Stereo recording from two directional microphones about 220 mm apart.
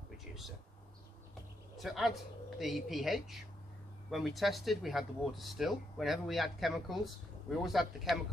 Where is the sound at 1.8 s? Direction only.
Centre (ahead or behind).